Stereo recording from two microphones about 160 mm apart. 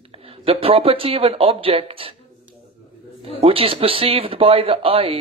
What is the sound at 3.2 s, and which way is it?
Speech, 35° right (ahead or behind).